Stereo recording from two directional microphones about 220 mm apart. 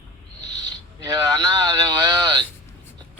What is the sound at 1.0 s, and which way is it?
Speech, 15° right (ahead or behind).